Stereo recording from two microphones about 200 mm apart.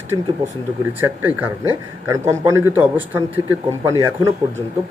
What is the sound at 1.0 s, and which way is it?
Speech, 10° right (ahead or behind).